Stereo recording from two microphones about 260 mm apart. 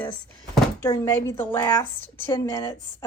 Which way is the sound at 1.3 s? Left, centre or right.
Centre.